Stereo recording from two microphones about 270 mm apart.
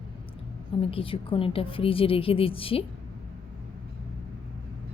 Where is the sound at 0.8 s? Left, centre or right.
Left.